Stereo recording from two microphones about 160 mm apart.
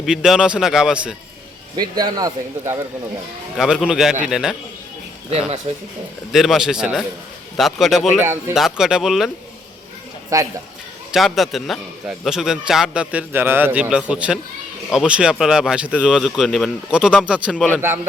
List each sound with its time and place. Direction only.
0.0 s a man's voice: centre (ahead or behind)
2.0 s a man's voice: 25° right (ahead or behind)
3.6 s a man's voice: 5° right (ahead or behind)
5.7 s speech: 45° right (ahead or behind)
6.3 s a man's voice: centre (ahead or behind)
8.2 s speech: 15° right (ahead or behind)
8.5 s a man's voice: centre (ahead or behind)
10.3 s a man's voice: 20° right (ahead or behind)
11.1 s a man's voice: centre (ahead or behind)